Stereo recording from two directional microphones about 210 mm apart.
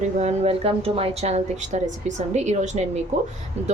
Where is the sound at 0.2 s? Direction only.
30° right (ahead or behind).